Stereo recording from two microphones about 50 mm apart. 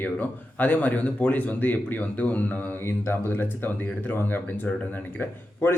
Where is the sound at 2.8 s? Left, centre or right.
Left.